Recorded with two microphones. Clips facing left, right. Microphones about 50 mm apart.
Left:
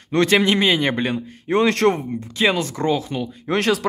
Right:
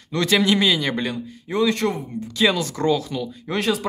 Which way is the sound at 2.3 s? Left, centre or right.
Left.